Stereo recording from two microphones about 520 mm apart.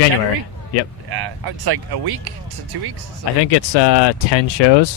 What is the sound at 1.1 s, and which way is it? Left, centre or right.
Speech, right.